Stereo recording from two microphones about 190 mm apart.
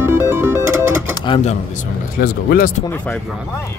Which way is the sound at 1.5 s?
45° left (ahead or behind).